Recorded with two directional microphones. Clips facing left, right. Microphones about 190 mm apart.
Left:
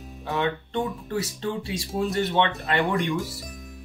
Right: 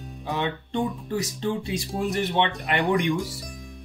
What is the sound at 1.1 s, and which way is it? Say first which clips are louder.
Speech: even; 20° right (ahead or behind).